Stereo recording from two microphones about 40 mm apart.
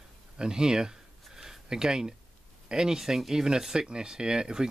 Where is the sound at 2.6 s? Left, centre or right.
Centre.